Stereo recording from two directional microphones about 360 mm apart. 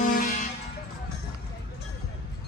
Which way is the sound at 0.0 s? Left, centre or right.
Left.